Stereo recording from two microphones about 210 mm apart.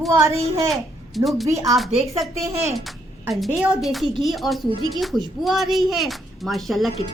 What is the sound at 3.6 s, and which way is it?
Speech, centre (ahead or behind).